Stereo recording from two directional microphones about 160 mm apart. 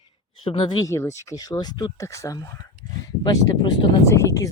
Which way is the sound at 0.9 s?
15° left (ahead or behind).